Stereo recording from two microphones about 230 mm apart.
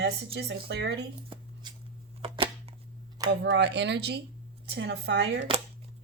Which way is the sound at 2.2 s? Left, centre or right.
Right.